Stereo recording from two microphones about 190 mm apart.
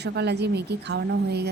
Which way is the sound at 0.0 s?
60° right (ahead or behind).